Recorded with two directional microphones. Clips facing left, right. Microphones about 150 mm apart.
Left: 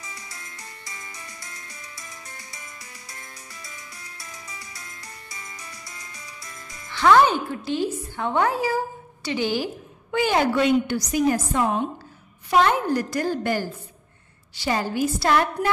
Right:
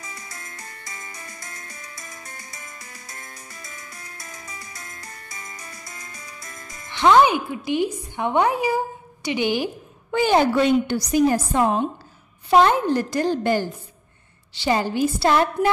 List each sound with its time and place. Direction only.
0.0 s music: 50° right (ahead or behind)
6.9 s speech: 20° right (ahead or behind)
10.1 s a woman's voice: 30° right (ahead or behind)